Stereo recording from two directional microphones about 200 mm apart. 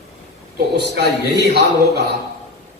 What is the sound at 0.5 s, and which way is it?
A man's voice, 55° right (ahead or behind).